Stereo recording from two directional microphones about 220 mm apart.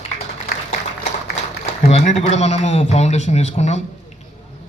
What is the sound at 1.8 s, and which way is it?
A man's voice, 30° left (ahead or behind).